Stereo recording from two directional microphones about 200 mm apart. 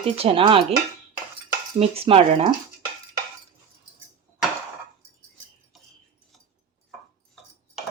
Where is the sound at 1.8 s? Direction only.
30° right (ahead or behind).